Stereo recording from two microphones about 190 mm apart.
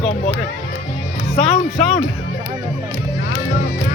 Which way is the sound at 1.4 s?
Centre (ahead or behind).